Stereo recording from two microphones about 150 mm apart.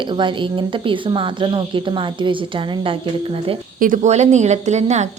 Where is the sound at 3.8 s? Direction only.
60° right (ahead or behind).